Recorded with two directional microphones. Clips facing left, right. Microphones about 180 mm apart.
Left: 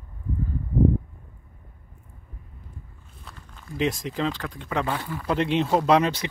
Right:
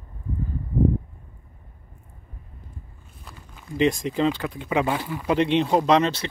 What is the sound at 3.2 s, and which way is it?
Speech, 5° right (ahead or behind).